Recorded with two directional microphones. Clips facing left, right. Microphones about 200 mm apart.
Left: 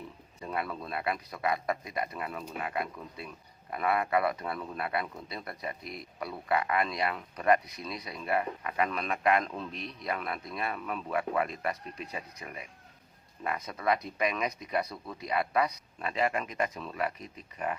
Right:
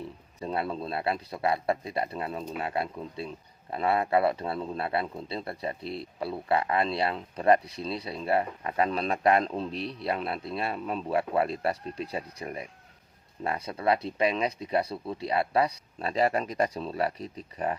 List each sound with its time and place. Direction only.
0.3 s a man's voice: 30° right (ahead or behind)